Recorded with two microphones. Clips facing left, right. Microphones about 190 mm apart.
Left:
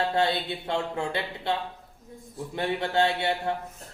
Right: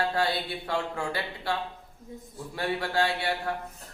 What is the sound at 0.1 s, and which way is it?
Speech, 25° left (ahead or behind).